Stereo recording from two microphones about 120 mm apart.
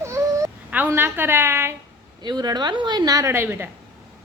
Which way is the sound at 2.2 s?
35° right (ahead or behind).